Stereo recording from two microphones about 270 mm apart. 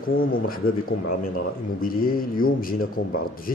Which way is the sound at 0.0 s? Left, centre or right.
Left.